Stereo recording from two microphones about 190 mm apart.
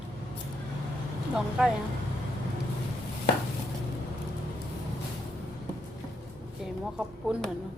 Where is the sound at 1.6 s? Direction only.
5° right (ahead or behind).